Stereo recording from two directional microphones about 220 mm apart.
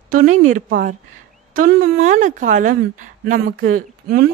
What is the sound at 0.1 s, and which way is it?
Speech, 40° right (ahead or behind).